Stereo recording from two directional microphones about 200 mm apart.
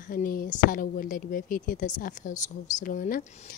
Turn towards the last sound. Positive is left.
turn(degrees=45)  # may be behind; listen again after turning